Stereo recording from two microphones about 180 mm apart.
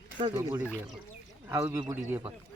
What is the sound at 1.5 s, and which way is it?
Speech, 15° right (ahead or behind).